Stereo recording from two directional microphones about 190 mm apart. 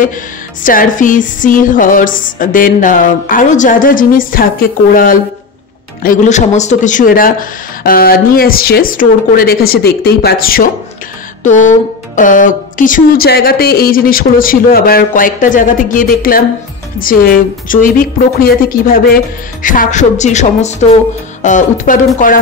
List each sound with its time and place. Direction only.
0.7 s a woman's voice: 45° left (ahead or behind)
11.4 s a sound: 40° left (ahead or behind)
12.2 s a woman's voice: 45° left (ahead or behind)